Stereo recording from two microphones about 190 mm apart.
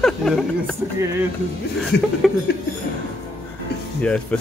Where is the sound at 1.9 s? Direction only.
65° left (ahead or behind).